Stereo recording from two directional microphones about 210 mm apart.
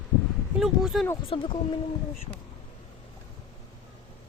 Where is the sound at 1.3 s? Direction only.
25° left (ahead or behind).